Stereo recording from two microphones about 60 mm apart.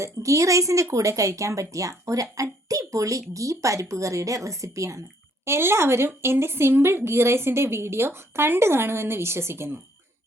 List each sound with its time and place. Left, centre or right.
0.0 s speech: right
5.5 s a woman's voice: right